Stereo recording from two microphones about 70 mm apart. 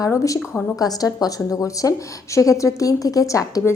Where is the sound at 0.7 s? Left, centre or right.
Left.